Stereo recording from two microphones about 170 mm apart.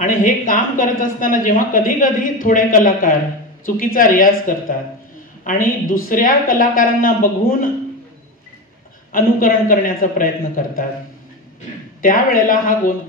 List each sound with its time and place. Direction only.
0.0 s a woman's voice: 50° left (ahead or behind)
9.1 s a woman's voice: 55° left (ahead or behind)
12.0 s a woman's voice: 55° left (ahead or behind)